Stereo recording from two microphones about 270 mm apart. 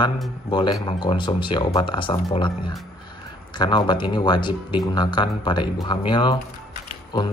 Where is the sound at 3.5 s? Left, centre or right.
Centre.